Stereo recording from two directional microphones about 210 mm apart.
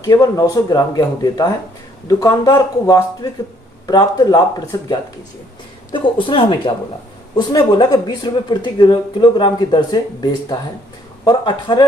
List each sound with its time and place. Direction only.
0.0 s speech: 15° left (ahead or behind)